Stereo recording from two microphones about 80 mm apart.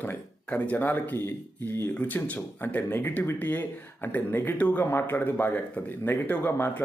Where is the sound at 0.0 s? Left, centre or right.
Left.